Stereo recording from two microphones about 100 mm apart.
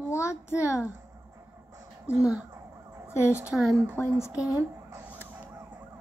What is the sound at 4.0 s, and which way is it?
Speech, 25° left (ahead or behind).